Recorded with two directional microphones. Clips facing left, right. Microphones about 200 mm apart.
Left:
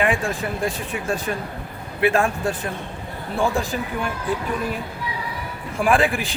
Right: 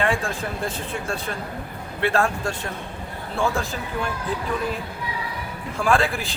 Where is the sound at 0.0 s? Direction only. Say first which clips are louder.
Left 2 dB; 15° left (ahead or behind).